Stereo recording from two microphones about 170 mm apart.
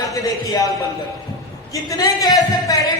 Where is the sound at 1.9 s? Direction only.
20° left (ahead or behind).